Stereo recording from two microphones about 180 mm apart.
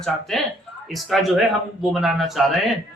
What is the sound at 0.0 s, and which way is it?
Speech, centre (ahead or behind).